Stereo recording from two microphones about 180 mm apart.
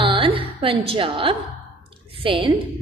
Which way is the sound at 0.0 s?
30° right (ahead or behind).